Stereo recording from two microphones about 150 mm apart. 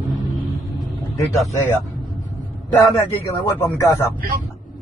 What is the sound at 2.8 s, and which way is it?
Speech, 20° left (ahead or behind).